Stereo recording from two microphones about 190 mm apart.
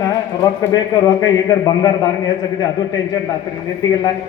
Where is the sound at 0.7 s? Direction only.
20° left (ahead or behind).